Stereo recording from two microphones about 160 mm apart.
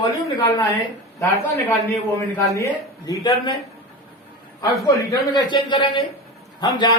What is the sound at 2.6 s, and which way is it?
Speech, 25° left (ahead or behind).